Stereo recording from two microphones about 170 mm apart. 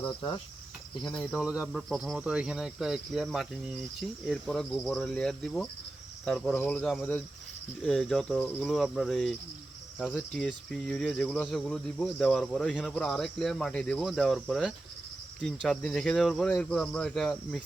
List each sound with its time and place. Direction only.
1.1 s speech: centre (ahead or behind)